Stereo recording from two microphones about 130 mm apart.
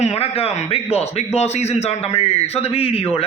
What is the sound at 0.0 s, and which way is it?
A man's voice, 50° left (ahead or behind).